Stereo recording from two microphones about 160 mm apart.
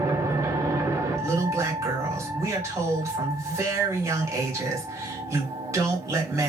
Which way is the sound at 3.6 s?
15° right (ahead or behind).